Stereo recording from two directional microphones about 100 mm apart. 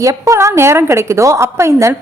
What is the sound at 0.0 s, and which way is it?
A woman's voice, 30° right (ahead or behind).